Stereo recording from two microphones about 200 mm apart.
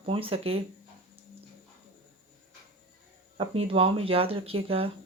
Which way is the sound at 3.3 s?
30° right (ahead or behind).